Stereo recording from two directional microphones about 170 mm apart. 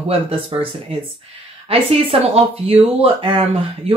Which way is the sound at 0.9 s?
35° right (ahead or behind).